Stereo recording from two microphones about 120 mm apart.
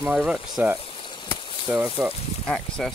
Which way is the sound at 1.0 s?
45° left (ahead or behind).